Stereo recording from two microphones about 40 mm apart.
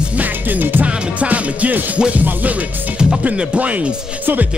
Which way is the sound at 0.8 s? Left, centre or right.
Right.